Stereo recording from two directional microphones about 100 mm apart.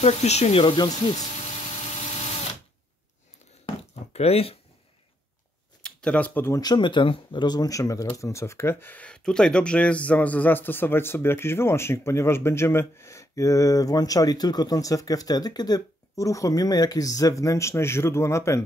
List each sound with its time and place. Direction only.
0.0 s speech: 90° left
0.7 s speech: 45° left (ahead or behind)
4.1 s speech: 90° left
5.8 s a sound: 5° left (ahead or behind)
6.6 s speech: 50° left (ahead or behind); by 18.6 s 30° left (ahead or behind)